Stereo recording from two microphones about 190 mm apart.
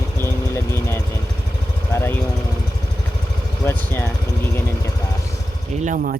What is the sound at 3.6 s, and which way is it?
Vehicle, 10° left (ahead or behind).